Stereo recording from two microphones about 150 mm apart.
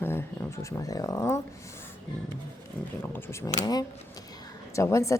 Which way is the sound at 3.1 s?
20° left (ahead or behind).